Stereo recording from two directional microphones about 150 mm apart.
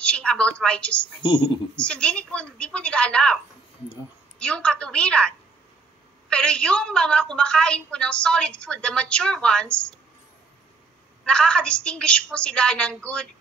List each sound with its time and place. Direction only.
0.0 s a woman's voice: 5° left (ahead or behind)
1.2 s speech: 30° left (ahead or behind)
1.8 s a woman's voice: 5° left (ahead or behind)
4.4 s a woman's voice: 5° left (ahead or behind)
11.2 s a woman's voice: 5° left (ahead or behind)